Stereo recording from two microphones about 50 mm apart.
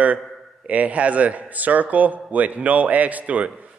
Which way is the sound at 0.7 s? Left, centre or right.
Right.